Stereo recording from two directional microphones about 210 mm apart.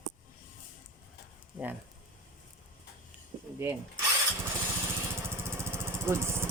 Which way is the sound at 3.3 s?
30° right (ahead or behind).